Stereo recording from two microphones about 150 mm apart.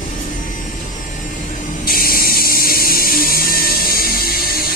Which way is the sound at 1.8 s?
75° left (ahead or behind).